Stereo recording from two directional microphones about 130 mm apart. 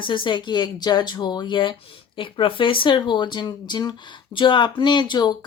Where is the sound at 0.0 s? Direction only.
35° left (ahead or behind).